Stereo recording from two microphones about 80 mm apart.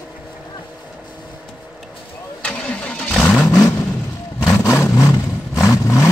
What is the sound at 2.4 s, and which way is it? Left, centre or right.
Vehicle, centre.